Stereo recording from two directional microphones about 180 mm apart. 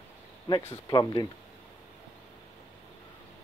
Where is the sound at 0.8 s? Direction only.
25° left (ahead or behind).